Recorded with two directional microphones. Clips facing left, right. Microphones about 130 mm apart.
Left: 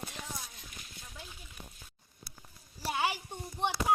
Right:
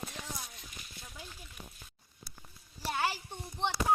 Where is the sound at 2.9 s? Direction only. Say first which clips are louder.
Left 1 dB; 15° left (ahead or behind).